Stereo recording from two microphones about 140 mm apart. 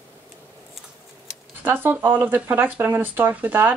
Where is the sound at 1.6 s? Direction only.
15° right (ahead or behind).